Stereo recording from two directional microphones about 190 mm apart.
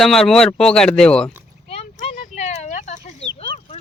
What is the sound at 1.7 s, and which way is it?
Chicken, 35° left (ahead or behind).